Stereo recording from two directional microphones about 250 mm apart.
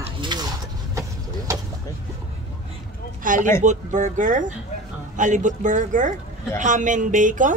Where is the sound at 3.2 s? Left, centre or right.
Right.